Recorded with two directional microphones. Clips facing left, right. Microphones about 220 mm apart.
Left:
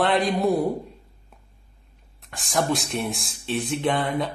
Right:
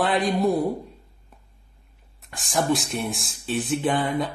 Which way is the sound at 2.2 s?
Centre (ahead or behind).